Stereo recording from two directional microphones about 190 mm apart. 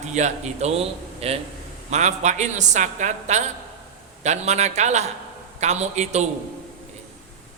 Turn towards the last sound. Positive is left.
turn(degrees=-35)  # may be behind; listen again after turning